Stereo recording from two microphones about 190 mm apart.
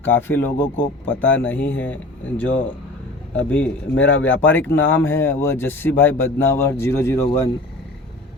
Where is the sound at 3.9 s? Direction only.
80° left.